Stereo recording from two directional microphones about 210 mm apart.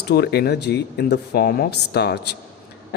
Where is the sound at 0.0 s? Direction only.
50° left (ahead or behind).